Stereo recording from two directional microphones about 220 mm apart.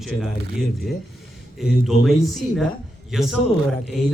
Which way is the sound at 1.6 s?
Centre (ahead or behind).